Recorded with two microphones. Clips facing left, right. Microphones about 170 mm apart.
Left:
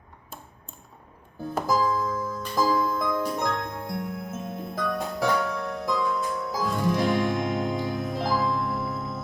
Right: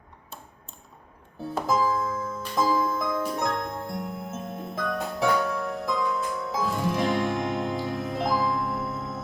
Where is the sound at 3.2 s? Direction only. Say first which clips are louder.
Even; 5° right (ahead or behind).